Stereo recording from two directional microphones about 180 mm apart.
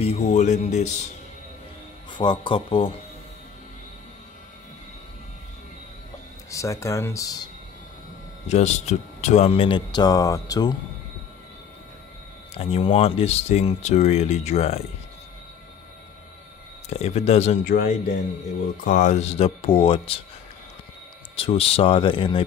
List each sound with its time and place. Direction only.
0.0 s speech: 35° left (ahead or behind)
2.0 s speech: 25° left (ahead or behind)
6.5 s speech: 15° left (ahead or behind)
8.5 s speech: 40° left (ahead or behind); by 10.7 s 20° left (ahead or behind)
12.5 s speech: 35° left (ahead or behind)
16.9 s speech: 35° left (ahead or behind)
17.6 s speech: 50° left (ahead or behind); by 20.2 s 30° left (ahead or behind)
21.4 s speech: 35° left (ahead or behind)